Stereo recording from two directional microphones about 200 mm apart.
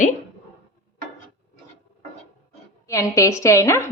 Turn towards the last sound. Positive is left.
turn(degrees=15)  # may be behind; listen again after turning